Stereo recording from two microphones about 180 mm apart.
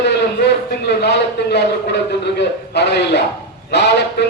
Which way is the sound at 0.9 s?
70° left (ahead or behind).